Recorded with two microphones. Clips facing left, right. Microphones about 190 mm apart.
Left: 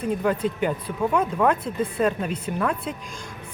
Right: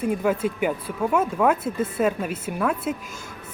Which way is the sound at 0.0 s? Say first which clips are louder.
Right 1 dB; 10° right (ahead or behind).